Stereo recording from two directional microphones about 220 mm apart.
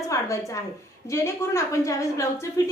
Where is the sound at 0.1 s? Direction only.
15° left (ahead or behind).